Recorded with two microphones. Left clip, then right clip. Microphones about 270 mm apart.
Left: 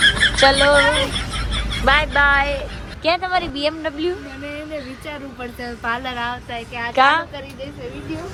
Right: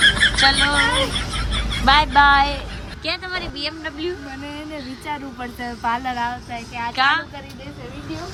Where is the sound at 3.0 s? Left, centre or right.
Centre.